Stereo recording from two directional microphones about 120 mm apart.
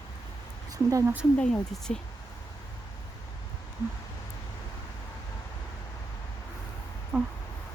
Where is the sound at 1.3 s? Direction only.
10° left (ahead or behind).